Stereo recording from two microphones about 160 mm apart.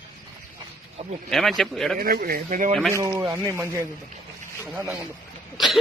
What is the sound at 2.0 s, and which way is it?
Speech, 70° right (ahead or behind).